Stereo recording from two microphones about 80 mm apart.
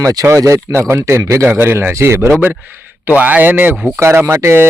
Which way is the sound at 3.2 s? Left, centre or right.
Right.